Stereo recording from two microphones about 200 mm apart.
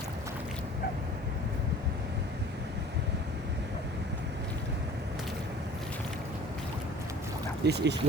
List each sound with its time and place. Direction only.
7.6 s speech: 55° right (ahead or behind)